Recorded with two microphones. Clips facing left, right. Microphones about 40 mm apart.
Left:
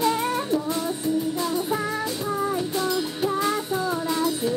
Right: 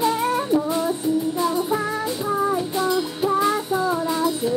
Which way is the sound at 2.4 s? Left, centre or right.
Centre.